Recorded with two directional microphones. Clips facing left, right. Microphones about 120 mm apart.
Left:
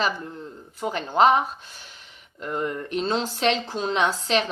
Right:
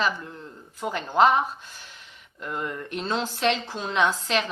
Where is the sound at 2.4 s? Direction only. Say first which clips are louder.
Left 4 dB; 40° left (ahead or behind).